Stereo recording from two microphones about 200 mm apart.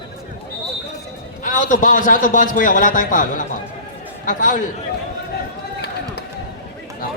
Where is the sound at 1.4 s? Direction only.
40° left (ahead or behind).